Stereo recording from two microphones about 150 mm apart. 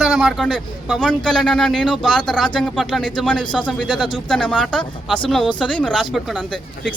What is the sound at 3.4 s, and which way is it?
Speech, 30° left (ahead or behind).